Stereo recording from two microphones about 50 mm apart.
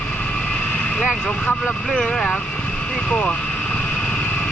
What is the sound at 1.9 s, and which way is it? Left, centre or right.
Speech, centre.